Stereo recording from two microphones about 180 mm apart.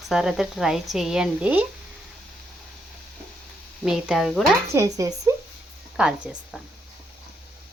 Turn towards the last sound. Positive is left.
turn(degrees=-5)  # may be behind; listen again after turning